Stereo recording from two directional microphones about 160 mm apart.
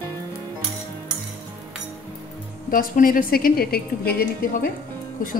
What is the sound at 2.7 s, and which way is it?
A woman's voice, 60° left (ahead or behind).